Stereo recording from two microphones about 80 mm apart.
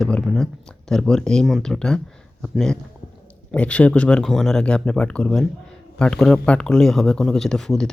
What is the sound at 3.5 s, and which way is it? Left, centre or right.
Speech, centre.